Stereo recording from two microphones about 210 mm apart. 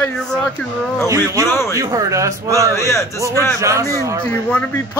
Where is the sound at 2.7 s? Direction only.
15° left (ahead or behind).